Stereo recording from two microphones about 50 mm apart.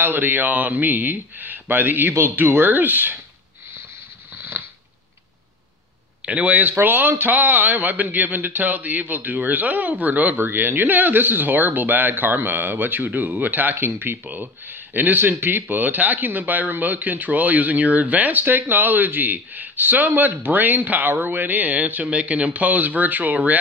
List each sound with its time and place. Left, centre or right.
0.0 s speech: right
4.4 s a sound: right
6.2 s speech: right
10.3 s speech: right
13.7 s speech: right
14.2 s speech: right